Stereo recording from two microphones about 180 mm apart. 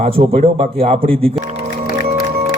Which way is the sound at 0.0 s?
30° right (ahead or behind).